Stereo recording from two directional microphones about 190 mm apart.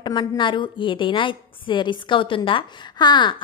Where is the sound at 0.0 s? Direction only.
25° left (ahead or behind).